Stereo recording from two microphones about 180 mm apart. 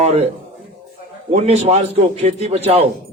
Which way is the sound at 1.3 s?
40° right (ahead or behind).